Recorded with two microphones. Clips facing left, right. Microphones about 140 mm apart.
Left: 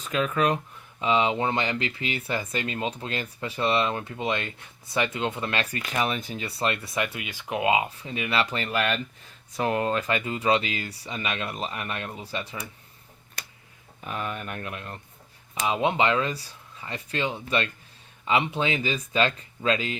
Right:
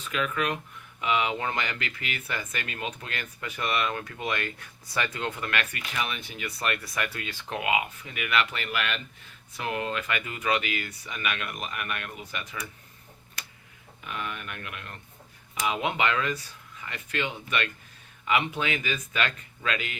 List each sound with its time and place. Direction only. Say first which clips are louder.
0.0 s speech: left 5 dB; 35° left (ahead or behind); by 7.6 s 15° left (ahead or behind)
7.6 s speech: left 5 dB; 30° left (ahead or behind)
14.0 s speech: left 4 dB; 35° left (ahead or behind)